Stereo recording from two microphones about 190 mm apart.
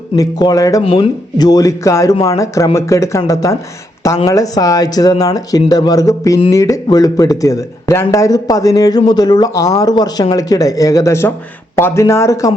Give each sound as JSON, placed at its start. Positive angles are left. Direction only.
{"t": 0.2, "sound": "speech", "side_deg": 20}